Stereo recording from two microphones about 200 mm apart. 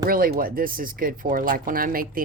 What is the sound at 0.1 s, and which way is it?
Speech, 45° right (ahead or behind).